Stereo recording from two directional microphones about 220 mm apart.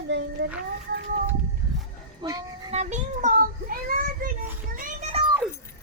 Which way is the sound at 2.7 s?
30° right (ahead or behind).